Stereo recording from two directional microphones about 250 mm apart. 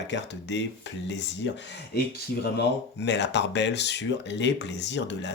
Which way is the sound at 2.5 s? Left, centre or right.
Left.